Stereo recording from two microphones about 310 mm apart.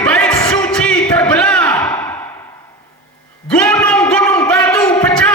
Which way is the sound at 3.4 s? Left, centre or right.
Centre.